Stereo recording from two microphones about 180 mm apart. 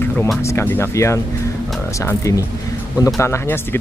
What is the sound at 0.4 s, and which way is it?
Speech, 15° left (ahead or behind).